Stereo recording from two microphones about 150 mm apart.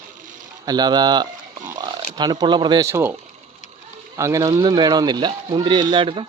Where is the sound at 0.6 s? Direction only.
25° right (ahead or behind).